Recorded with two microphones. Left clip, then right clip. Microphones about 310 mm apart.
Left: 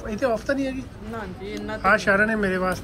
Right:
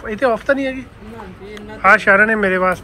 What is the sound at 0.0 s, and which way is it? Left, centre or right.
Speech, centre.